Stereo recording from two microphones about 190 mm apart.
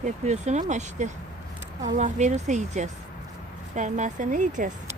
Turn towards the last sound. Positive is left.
turn(degrees=-40)  # may be behind; listen again after turning